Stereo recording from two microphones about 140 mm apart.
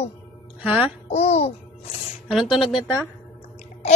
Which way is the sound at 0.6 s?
10° right (ahead or behind).